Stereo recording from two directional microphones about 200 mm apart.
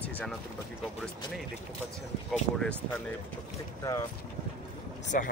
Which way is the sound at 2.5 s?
5° left (ahead or behind).